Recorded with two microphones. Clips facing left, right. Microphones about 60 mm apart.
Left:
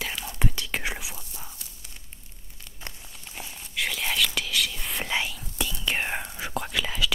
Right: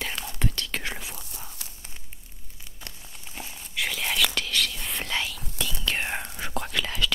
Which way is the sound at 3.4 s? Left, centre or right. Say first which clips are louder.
Even; centre.